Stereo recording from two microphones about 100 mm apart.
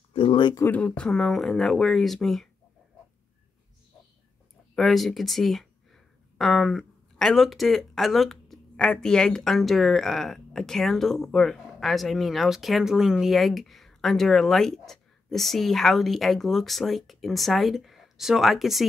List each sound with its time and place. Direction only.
0.1 s speech: 65° left (ahead or behind)
0.7 s speech: 10° left (ahead or behind)
4.7 s speech: centre (ahead or behind)